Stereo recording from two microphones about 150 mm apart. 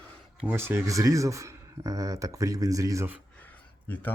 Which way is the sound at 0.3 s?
10° right (ahead or behind).